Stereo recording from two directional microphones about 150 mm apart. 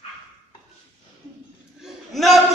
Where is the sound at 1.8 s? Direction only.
Centre (ahead or behind).